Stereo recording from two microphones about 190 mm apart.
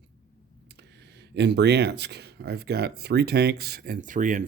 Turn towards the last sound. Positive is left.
turn(degrees=-45)  # may be behind; listen again after turning